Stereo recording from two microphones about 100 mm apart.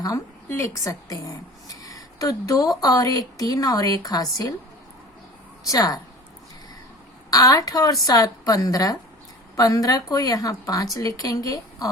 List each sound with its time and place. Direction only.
0.0 s a woman's voice: 35° left (ahead or behind)
5.6 s a woman's voice: 40° left (ahead or behind)
7.3 s a woman's voice: 35° left (ahead or behind)